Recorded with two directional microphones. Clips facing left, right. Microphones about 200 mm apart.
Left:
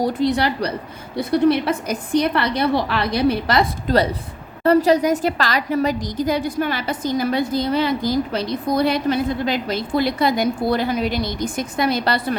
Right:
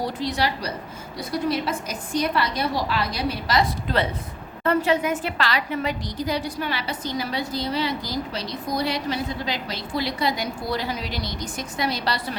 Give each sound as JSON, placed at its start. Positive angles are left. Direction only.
{"t": 0.0, "sound": "a woman's voice", "side_deg": 55}
{"t": 3.8, "sound": "a woman's voice", "side_deg": 40}